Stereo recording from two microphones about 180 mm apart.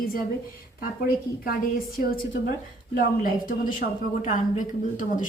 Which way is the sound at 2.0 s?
55° left (ahead or behind).